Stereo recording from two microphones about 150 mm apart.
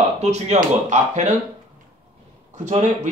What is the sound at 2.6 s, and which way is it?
Speech, 55° right (ahead or behind).